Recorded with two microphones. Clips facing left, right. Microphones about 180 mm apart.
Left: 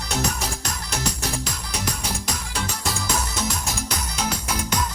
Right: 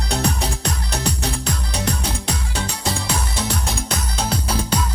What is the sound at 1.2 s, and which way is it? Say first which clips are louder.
Music: right 4 dB; 60° right (ahead or behind).